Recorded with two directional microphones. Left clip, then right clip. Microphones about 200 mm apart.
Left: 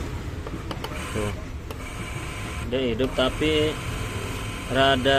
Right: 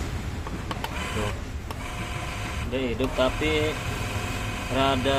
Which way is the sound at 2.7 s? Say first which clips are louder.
Left 3 dB; 20° left (ahead or behind).